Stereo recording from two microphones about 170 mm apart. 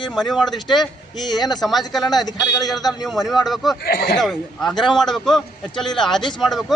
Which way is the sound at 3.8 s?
65° left (ahead or behind).